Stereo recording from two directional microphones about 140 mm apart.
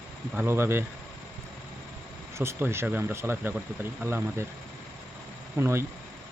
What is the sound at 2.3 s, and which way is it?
Speech, 20° right (ahead or behind).